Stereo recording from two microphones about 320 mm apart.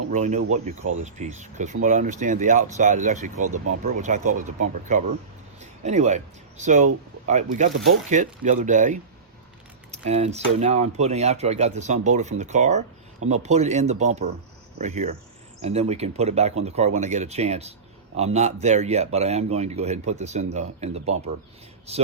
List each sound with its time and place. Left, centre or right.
0.1 s speech: right